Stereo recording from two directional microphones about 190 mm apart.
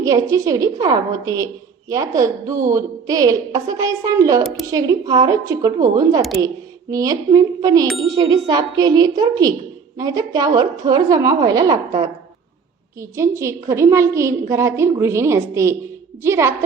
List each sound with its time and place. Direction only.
0.0 s a woman's voice: 15° right (ahead or behind)
7.9 s ding: centre (ahead or behind)
8.1 s a woman's voice: 20° right (ahead or behind)
13.0 s a woman's voice: 15° right (ahead or behind)